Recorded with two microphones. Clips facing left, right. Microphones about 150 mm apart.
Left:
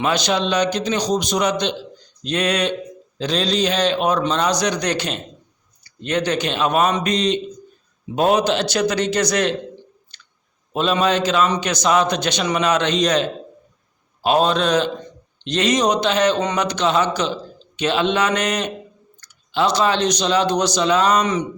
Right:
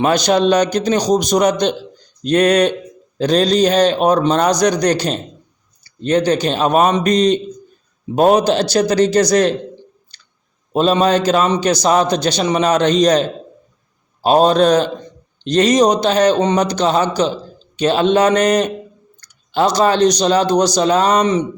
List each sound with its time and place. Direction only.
0.0 s a man's voice: 45° right (ahead or behind)
10.1 s clicking: 35° right (ahead or behind)
10.7 s a man's voice: 35° right (ahead or behind)